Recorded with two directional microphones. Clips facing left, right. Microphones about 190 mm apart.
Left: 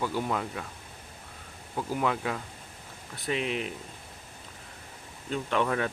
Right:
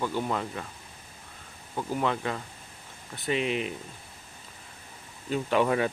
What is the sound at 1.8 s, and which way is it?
Speech, 5° left (ahead or behind).